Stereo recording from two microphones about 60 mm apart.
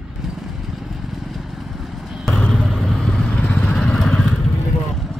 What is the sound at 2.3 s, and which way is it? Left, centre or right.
Vehicle, centre.